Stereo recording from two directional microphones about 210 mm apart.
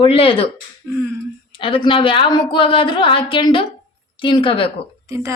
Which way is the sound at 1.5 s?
25° left (ahead or behind).